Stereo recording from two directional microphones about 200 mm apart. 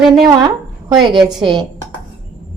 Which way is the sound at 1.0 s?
20° right (ahead or behind).